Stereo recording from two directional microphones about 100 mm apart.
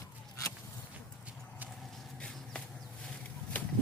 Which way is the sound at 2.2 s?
10° left (ahead or behind).